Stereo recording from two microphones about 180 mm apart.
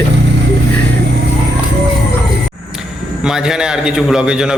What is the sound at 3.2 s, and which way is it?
Speech, 5° right (ahead or behind).